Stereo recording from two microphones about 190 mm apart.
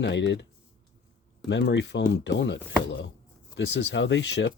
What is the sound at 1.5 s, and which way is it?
Speech, 65° left (ahead or behind).